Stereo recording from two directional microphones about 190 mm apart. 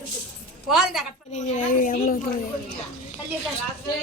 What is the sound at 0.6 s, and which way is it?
Speech, centre (ahead or behind).